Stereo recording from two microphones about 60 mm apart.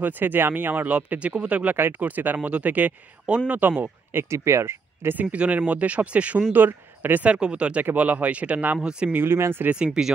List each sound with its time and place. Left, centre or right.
0.0 s speech: right
0.9 s speech: centre; by 5.1 s right
5.1 s speech: right
7.2 s speech: centre
9.0 s speech: right
10.0 s speech: centre